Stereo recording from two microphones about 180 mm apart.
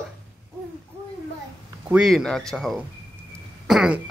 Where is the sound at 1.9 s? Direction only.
Centre (ahead or behind).